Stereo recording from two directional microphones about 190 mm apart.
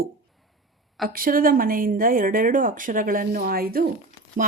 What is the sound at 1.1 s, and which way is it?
Speech, 50° right (ahead or behind).